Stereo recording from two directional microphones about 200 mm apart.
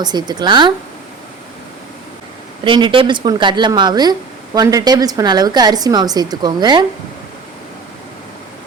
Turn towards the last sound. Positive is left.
turn(degrees=-20)  # may be behind; listen again after turning